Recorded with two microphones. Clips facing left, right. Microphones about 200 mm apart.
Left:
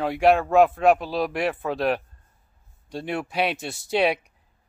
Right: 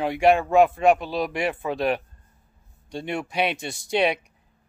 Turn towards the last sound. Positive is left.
turn(degrees=5)  # may be behind; listen again after turning